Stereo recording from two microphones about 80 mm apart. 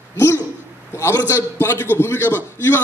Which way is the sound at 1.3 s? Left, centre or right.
Left.